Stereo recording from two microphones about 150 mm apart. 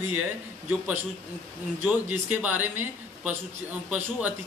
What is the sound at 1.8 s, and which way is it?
Speech, 10° right (ahead or behind).